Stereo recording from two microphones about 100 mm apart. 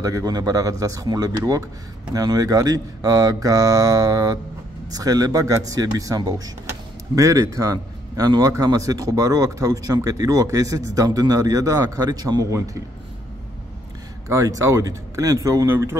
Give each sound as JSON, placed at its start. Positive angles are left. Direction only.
{"t": 0.0, "sound": "a man's voice", "side_deg": -40}
{"t": 14.3, "sound": "a man's voice", "side_deg": -30}